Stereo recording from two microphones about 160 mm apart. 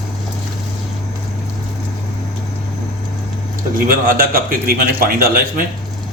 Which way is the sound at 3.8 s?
65° right (ahead or behind).